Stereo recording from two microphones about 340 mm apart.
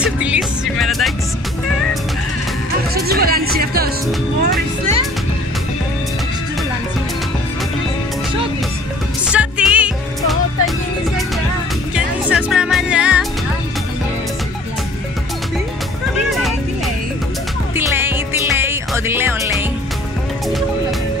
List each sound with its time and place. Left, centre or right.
0.0 s music: centre
2.9 s speech: right
4.4 s music: right
9.3 s music: centre
11.9 s music: centre
17.7 s music: centre